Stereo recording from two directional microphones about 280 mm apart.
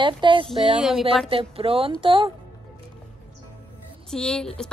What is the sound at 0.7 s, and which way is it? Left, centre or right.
Speech, centre.